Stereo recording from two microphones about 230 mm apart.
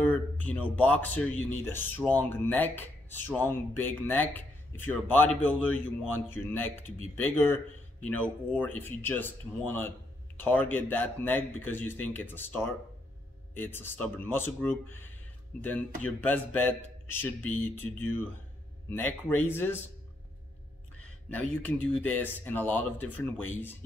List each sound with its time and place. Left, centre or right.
0.0 s speech: centre
21.0 s speech: centre